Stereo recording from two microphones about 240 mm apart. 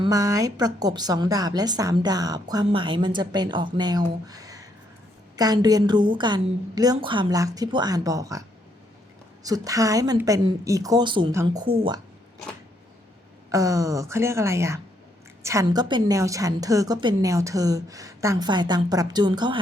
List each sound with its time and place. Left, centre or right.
0.0 s a woman's voice: centre
13.5 s a woman's voice: centre